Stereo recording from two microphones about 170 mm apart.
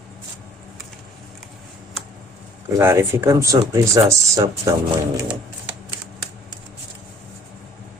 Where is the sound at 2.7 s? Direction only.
15° right (ahead or behind).